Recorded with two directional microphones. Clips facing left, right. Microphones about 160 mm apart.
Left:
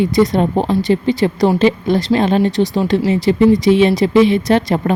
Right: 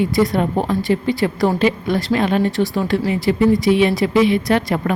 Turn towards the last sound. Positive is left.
turn(degrees=25)  # may be behind; listen again after turning